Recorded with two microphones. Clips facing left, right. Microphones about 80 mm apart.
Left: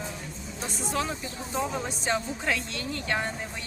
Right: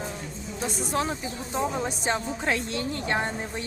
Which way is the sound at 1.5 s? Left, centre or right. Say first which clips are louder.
Right 2 dB; right.